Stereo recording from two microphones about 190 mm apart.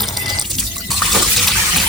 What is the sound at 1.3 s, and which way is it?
Water, centre (ahead or behind).